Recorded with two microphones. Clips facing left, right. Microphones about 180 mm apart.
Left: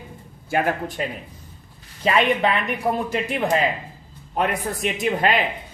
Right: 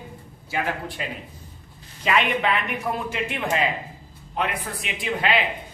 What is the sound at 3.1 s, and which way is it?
A woman's voice, 40° left (ahead or behind).